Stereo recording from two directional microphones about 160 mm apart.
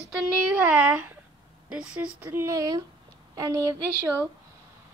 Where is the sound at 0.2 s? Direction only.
10° right (ahead or behind).